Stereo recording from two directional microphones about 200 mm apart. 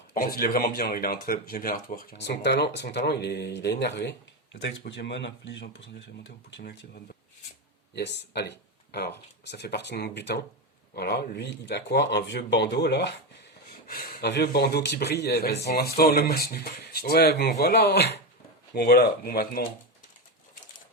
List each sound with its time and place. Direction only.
0.1 s speech: 45° left (ahead or behind)
2.1 s speech: 60° left (ahead or behind)